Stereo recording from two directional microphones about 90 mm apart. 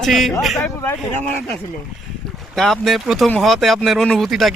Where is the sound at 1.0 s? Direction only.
5° left (ahead or behind).